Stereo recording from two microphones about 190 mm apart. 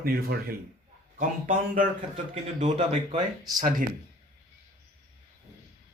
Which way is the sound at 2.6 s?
35° right (ahead or behind).